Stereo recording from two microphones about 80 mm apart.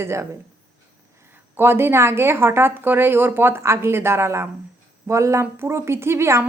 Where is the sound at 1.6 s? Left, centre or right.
Right.